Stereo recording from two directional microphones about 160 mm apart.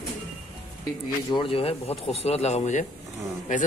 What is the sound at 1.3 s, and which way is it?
A man's voice, 35° left (ahead or behind).